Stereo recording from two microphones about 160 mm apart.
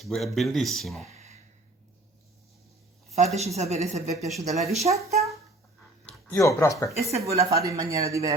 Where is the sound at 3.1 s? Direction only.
45° right (ahead or behind).